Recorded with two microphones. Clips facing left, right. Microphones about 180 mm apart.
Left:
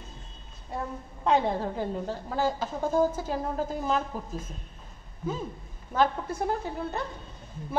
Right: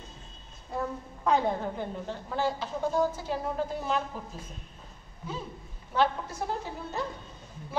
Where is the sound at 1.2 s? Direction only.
35° left (ahead or behind).